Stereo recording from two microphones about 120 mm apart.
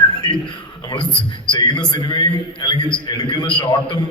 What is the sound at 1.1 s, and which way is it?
Speech, 10° left (ahead or behind).